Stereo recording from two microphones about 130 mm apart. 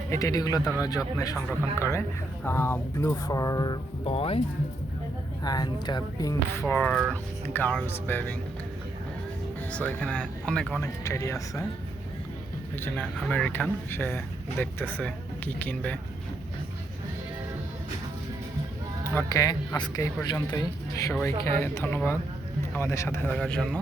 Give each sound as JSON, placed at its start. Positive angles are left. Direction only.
{"t": 0.1, "sound": "speech", "side_deg": 25}
{"t": 4.0, "sound": "speech", "side_deg": 45}
{"t": 5.4, "sound": "speech", "side_deg": 30}
{"t": 9.7, "sound": "speech", "side_deg": 10}
{"t": 10.8, "sound": "speech", "side_deg": 20}
{"t": 13.3, "sound": "speech", "side_deg": 10}
{"t": 19.1, "sound": "speech", "side_deg": 25}
{"t": 20.3, "sound": "speech", "side_deg": 20}